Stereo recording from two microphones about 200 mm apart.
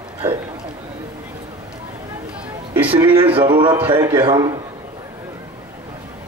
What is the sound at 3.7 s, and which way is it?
Speech, 10° right (ahead or behind).